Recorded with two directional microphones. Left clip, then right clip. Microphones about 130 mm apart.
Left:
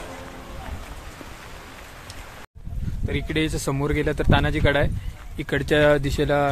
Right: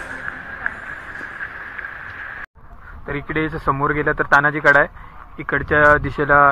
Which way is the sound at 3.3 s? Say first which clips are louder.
Right 6 dB; 25° left (ahead or behind).